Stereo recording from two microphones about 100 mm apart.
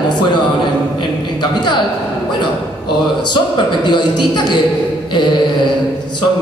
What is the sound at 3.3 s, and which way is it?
A man's voice, 50° left (ahead or behind).